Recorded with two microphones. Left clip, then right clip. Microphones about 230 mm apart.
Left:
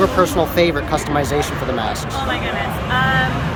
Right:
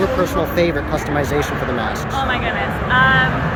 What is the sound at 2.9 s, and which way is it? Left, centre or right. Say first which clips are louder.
Speech: right 4 dB; centre.